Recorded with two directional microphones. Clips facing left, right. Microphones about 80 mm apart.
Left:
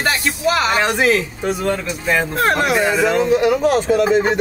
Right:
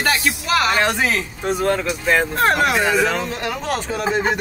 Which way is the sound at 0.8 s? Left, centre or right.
Centre.